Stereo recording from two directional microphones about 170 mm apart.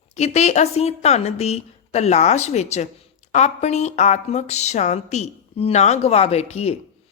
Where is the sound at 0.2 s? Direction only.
40° left (ahead or behind).